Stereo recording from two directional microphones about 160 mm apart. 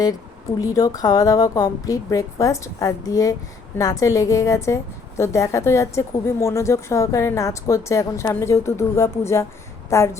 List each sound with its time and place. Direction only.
0.6 s a woman's voice: 20° left (ahead or behind)